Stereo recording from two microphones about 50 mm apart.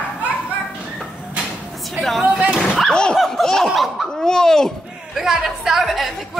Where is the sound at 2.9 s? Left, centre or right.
Centre.